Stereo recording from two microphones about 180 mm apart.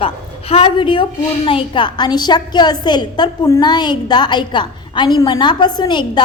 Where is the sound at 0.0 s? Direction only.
30° left (ahead or behind).